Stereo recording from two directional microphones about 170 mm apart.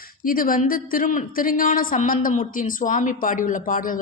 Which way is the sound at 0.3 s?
55° left (ahead or behind).